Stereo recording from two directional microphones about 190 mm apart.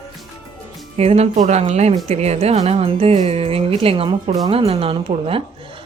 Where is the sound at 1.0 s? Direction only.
35° right (ahead or behind).